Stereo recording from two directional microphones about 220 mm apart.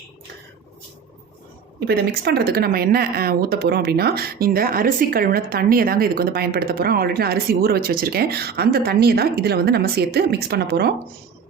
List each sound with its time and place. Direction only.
1.8 s speech: 45° right (ahead or behind)